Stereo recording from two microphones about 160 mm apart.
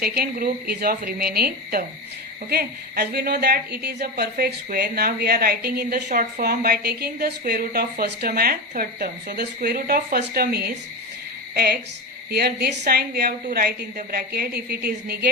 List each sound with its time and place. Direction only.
0.0 s a woman's voice: 75° right (ahead or behind)